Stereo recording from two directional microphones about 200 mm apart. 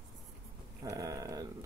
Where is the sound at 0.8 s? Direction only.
15° right (ahead or behind).